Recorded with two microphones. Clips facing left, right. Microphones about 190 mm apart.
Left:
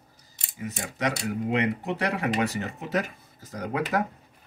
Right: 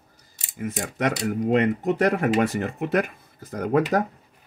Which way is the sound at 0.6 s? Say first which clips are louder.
Right 4 dB; 50° right (ahead or behind).